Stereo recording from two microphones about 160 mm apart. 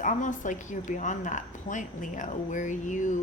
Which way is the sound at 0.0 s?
55° left (ahead or behind).